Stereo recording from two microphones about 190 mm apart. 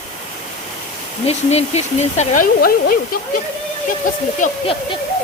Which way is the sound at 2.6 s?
50° left (ahead or behind).